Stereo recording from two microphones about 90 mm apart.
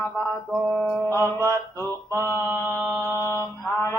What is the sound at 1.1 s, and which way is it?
Mantra, 25° left (ahead or behind).